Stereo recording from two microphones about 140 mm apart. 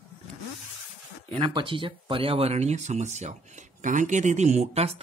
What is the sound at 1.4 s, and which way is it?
Speech, 35° right (ahead or behind).